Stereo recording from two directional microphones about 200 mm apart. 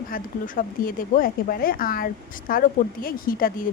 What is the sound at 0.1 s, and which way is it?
Speech, 45° left (ahead or behind).